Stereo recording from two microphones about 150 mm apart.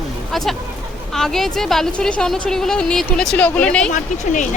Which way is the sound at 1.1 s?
Centre (ahead or behind).